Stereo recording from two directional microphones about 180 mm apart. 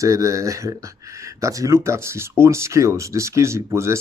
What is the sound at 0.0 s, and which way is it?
Speech, 15° right (ahead or behind).